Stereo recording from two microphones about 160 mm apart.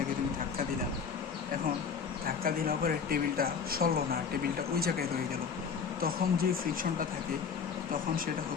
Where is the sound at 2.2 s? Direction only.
65° right (ahead or behind).